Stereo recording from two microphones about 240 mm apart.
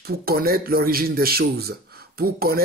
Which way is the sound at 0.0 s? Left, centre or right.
Right.